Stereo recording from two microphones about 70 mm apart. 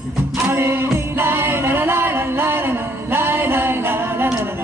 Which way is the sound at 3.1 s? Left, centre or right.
Right.